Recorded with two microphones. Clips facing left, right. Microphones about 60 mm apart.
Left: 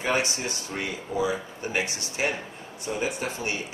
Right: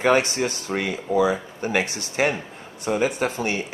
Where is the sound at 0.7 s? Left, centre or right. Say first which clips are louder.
Right 8 dB; right.